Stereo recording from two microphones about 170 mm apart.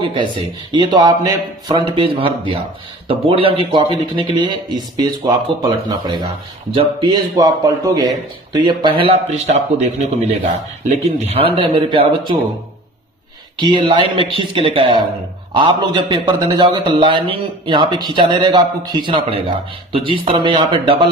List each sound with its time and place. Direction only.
0.2 s a man's voice: 25° right (ahead or behind)
6.7 s a man's voice: 25° right (ahead or behind)
13.6 s a man's voice: 25° right (ahead or behind)